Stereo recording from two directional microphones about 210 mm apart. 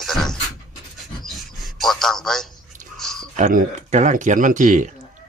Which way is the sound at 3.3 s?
35° right (ahead or behind).